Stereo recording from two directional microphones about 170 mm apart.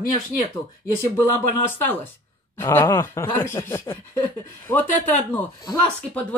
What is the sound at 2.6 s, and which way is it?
Speech, 15° left (ahead or behind).